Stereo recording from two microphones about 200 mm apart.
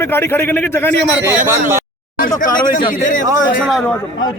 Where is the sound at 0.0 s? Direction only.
10° left (ahead or behind).